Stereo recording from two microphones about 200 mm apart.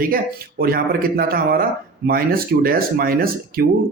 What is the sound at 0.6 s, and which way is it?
Speech, 50° right (ahead or behind).